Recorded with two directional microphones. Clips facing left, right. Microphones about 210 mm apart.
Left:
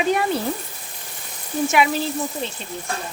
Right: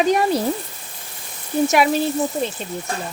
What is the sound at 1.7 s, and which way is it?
Speech, 40° right (ahead or behind).